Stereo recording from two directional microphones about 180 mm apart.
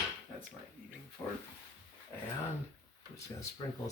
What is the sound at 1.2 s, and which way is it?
Speech, 15° left (ahead or behind).